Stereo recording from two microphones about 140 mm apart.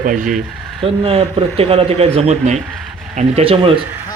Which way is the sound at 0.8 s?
45° right (ahead or behind).